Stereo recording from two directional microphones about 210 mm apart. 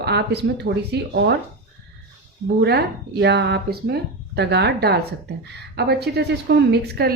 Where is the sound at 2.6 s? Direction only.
50° right (ahead or behind).